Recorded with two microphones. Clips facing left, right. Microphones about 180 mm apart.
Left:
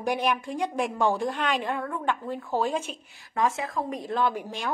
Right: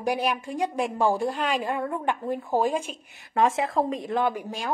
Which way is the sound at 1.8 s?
20° right (ahead or behind).